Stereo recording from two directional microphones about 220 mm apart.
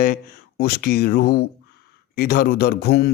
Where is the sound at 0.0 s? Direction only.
40° left (ahead or behind).